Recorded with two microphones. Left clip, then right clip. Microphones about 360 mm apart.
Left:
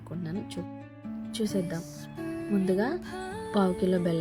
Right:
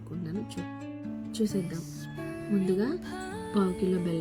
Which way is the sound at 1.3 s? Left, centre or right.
Centre.